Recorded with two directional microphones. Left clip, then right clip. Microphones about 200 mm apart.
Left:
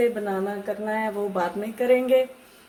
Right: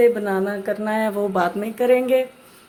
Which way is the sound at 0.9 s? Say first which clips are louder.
Right 4 dB; 40° right (ahead or behind).